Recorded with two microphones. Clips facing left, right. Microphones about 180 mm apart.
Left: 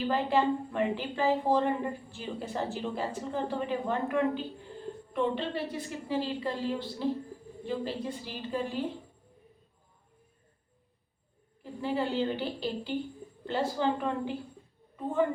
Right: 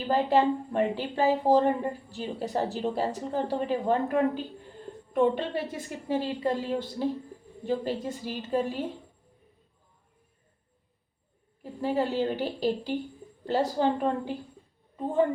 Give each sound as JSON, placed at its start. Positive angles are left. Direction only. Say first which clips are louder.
{"t": 0.1, "sound": "a woman's voice", "louder": "right 5 dB", "side_deg": -40}
{"t": 11.6, "sound": "a woman's voice", "louder": "right 3 dB", "side_deg": -45}